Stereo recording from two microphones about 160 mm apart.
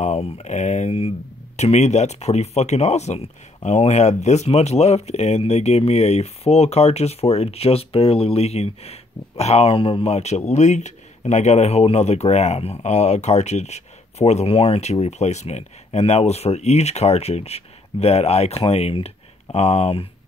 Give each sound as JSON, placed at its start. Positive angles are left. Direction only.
{"t": 0.0, "sound": "speech", "side_deg": 45}